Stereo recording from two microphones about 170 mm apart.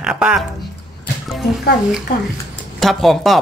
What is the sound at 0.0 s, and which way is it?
Speech, 5° right (ahead or behind).